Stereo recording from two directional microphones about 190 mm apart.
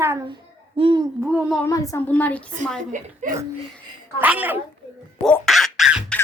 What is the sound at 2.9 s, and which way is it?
Speech, 40° right (ahead or behind).